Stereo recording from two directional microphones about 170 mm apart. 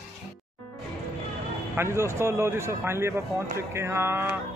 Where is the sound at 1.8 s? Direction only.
15° right (ahead or behind).